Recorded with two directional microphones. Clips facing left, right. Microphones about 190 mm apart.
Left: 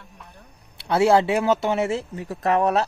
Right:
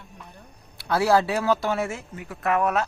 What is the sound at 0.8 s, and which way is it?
Speech, 25° left (ahead or behind).